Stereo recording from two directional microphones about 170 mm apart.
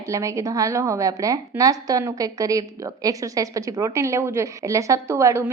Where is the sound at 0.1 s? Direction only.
20° right (ahead or behind).